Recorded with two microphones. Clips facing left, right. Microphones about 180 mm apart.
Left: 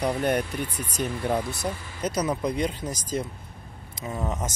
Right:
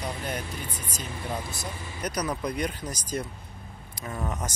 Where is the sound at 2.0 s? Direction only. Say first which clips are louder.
Left 4 dB; 25° left (ahead or behind).